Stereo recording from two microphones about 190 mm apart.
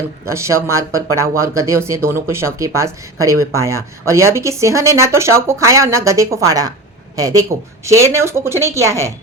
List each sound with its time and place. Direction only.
0.3 s a woman's voice: 15° right (ahead or behind)